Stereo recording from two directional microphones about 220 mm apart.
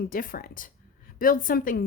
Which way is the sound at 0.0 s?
40° left (ahead or behind).